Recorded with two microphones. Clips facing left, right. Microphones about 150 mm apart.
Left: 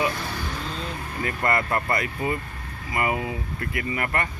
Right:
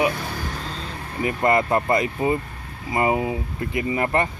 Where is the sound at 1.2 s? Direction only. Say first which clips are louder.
Right 5 dB; 20° right (ahead or behind).